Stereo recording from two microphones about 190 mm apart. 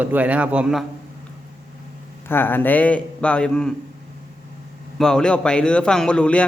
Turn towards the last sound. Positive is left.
turn(degrees=5)  # may be behind; listen again after turning